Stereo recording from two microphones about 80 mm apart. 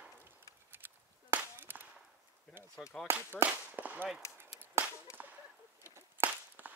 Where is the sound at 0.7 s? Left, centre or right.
Right.